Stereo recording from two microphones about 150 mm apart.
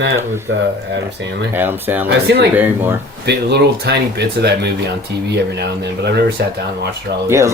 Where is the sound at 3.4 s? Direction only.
90° right.